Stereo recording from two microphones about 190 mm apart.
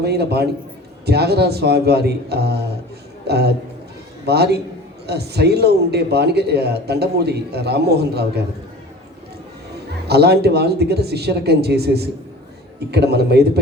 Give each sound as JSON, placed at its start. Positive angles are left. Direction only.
{"t": 0.0, "sound": "a man's voice", "side_deg": -60}
{"t": 10.1, "sound": "speech", "side_deg": -60}